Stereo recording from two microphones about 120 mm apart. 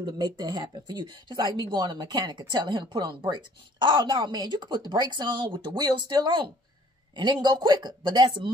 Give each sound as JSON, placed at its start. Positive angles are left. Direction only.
{"t": 0.0, "sound": "speech", "side_deg": -35}